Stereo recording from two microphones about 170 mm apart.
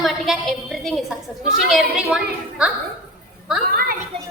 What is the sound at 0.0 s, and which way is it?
A woman's voice, centre (ahead or behind).